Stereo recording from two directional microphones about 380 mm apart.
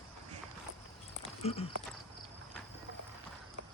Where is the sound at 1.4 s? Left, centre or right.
Centre.